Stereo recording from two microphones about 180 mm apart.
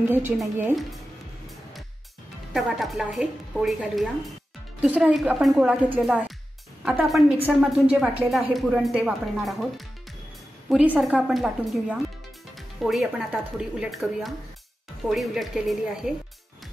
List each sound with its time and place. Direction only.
0.4 s speech: 5° right (ahead or behind)
2.5 s a woman's voice: centre (ahead or behind)